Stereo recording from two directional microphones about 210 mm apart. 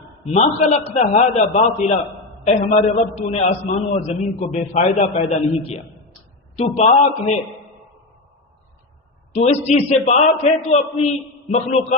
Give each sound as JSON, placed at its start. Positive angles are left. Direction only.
{"t": 0.3, "sound": "a man's voice", "side_deg": 30}
{"t": 2.5, "sound": "a man's voice", "side_deg": 35}
{"t": 9.3, "sound": "a man's voice", "side_deg": 30}